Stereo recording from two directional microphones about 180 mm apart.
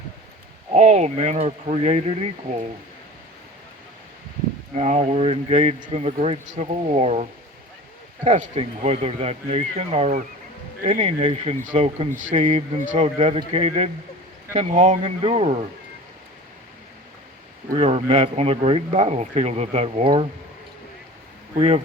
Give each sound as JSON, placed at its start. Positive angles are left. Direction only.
{"t": 0.7, "sound": "speech", "side_deg": -40}
{"t": 4.7, "sound": "speech", "side_deg": -40}
{"t": 17.7, "sound": "speech", "side_deg": -35}
{"t": 21.5, "sound": "speech", "side_deg": -35}